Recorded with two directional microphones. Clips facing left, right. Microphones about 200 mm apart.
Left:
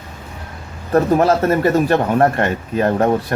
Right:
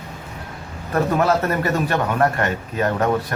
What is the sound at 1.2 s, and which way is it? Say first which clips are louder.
A man's voice: left 5 dB; 25° left (ahead or behind).